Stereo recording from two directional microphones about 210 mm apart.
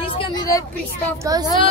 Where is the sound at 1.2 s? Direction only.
15° right (ahead or behind).